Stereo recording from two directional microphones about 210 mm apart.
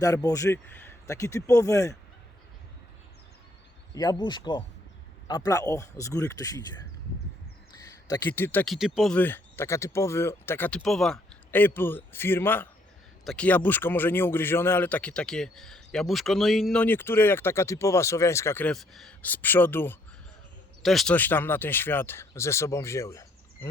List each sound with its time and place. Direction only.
0.0 s a man's voice: 15° left (ahead or behind)
3.9 s a man's voice: 20° left (ahead or behind)
8.0 s a man's voice: 20° left (ahead or behind)